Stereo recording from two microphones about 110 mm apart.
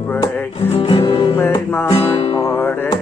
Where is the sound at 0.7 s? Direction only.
55° left (ahead or behind).